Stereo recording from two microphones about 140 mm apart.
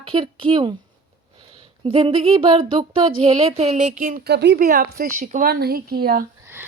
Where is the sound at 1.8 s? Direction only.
40° right (ahead or behind); by 6.2 s 90° right.